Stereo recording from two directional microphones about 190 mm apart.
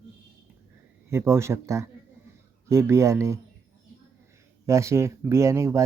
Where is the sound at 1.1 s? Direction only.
15° right (ahead or behind).